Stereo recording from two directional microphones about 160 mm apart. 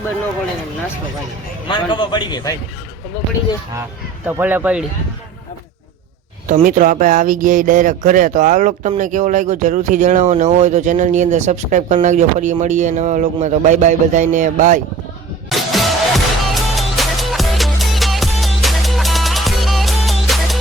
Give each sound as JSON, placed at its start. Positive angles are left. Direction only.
{"t": 1.6, "sound": "a man's voice", "side_deg": 30}
{"t": 4.3, "sound": "speech", "side_deg": -10}
{"t": 6.5, "sound": "speech", "side_deg": -55}
{"t": 15.4, "sound": "music", "side_deg": 0}